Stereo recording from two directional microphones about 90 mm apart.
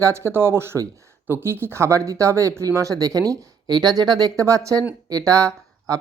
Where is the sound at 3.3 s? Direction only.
50° right (ahead or behind).